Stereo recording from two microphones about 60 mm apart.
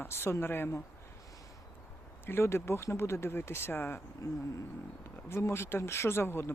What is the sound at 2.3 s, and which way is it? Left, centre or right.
Speech, left.